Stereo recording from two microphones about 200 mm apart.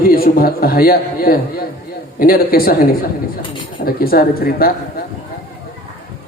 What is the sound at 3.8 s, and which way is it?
Speech, 50° left (ahead or behind).